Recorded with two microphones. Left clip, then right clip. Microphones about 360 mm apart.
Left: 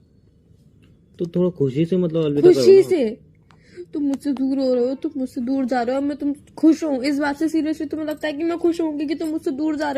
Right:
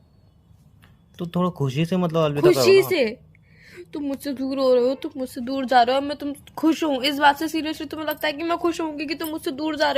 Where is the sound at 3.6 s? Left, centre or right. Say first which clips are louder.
Left 6 dB; right.